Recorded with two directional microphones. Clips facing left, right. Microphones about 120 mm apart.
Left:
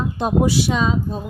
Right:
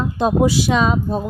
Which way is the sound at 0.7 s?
70° right (ahead or behind).